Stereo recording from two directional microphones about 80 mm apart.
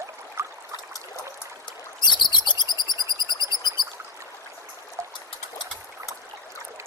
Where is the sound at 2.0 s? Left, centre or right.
Left.